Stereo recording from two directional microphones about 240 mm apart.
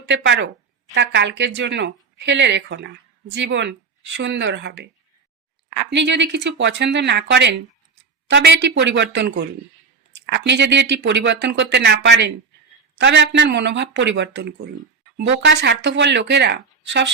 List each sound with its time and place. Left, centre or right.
0.0 s speech: right